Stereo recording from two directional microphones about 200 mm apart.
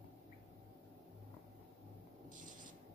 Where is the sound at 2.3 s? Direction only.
40° right (ahead or behind).